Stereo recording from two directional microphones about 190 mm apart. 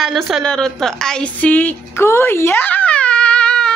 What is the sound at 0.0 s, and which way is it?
A woman's voice, centre (ahead or behind).